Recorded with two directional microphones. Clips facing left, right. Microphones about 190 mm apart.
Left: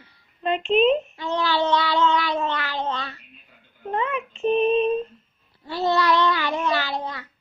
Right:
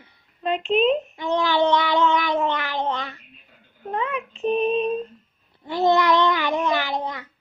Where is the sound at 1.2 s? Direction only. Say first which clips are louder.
Right 3 dB; 15° right (ahead or behind).